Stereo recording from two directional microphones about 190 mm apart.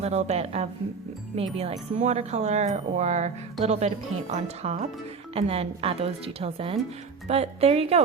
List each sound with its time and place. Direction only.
0.0 s speech: 35° right (ahead or behind)